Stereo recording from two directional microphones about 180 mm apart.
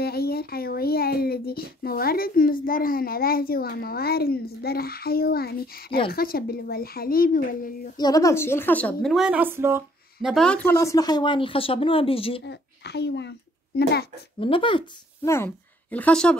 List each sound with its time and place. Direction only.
0.0 s a child's voice: 60° left (ahead or behind)
8.0 s a woman's voice: 20° left (ahead or behind); by 9.8 s 15° right (ahead or behind)
10.2 s speech: 5° left (ahead or behind); by 12.4 s 30° left (ahead or behind)
12.4 s a child's voice: 65° left (ahead or behind)
14.4 s speech: 30° left (ahead or behind)
15.2 s a woman's voice: 15° left (ahead or behind)